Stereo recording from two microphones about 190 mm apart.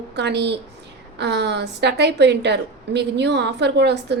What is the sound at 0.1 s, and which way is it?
A woman's voice, 65° right (ahead or behind).